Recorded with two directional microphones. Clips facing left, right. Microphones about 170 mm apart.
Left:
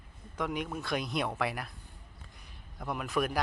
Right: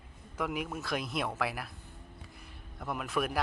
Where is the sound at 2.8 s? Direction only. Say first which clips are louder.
Left 1 dB; centre (ahead or behind).